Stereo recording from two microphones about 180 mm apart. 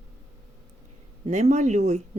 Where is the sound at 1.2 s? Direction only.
40° right (ahead or behind).